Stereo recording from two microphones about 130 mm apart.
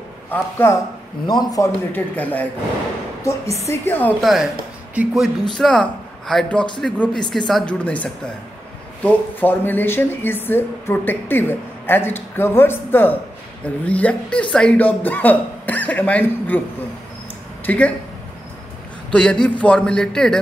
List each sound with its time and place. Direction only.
0.3 s a woman's voice: 15° left (ahead or behind)
1.2 s a man's voice: 35° left (ahead or behind)
1.9 s a woman's voice: 15° left (ahead or behind)
3.2 s a woman's voice: 25° left (ahead or behind)
4.2 s a man's voice: centre (ahead or behind)
17.6 s a woman's voice: 10° left (ahead or behind)
19.1 s speech: 5° left (ahead or behind)